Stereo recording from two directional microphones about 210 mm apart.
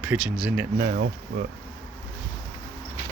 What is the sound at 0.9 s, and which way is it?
Speech, 45° right (ahead or behind).